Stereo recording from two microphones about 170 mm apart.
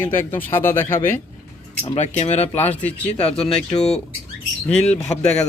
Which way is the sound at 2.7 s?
10° left (ahead or behind).